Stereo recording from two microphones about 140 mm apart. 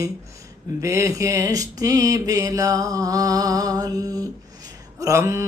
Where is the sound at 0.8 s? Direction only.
20° right (ahead or behind).